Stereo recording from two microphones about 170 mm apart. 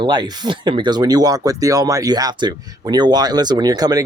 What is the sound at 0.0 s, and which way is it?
Speech, 25° right (ahead or behind).